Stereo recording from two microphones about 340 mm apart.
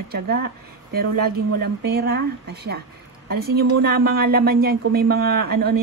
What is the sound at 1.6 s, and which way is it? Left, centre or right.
A woman's voice, right.